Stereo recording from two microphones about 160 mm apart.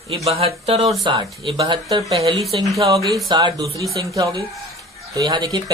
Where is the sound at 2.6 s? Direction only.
20° right (ahead or behind).